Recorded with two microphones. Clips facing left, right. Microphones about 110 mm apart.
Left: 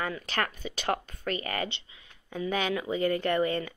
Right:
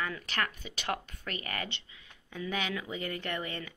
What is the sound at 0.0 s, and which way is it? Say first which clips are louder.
Speech: left 3 dB; 35° left (ahead or behind).